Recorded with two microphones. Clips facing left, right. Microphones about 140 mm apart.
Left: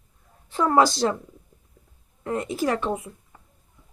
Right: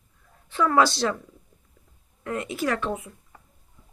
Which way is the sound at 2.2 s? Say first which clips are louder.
Left 2 dB; 30° left (ahead or behind).